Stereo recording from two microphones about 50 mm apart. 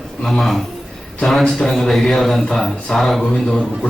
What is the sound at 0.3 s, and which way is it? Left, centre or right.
Speech, centre.